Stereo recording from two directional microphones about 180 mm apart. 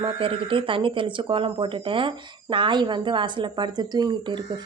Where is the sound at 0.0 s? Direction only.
30° right (ahead or behind).